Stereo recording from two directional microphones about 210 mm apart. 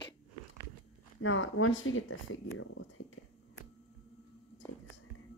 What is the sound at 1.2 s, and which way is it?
Speech, 75° left (ahead or behind).